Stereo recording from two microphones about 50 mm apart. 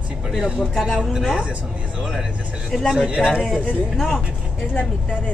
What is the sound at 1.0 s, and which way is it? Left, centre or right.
Speech, centre.